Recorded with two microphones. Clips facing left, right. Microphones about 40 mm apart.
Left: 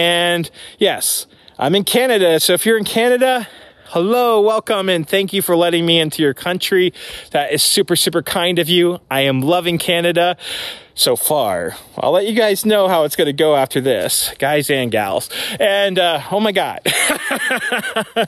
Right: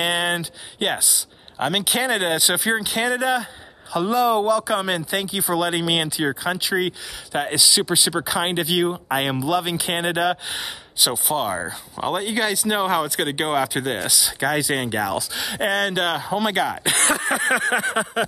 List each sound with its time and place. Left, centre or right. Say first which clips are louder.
0.0 s speech: left 7 dB; left
1.6 s a sound: left 7 dB; centre
2.0 s speech: left 10 dB; left
2.8 s a sound: left 8 dB; centre
3.1 s speech: left 8 dB; left
6.7 s speech: left 11 dB; left
7.3 s speech: left 6 dB; left
11.4 s speech: left 7 dB; left
17.0 s a sound: left 1 dB; centre